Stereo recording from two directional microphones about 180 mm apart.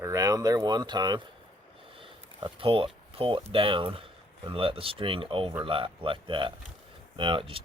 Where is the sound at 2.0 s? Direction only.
30° right (ahead or behind).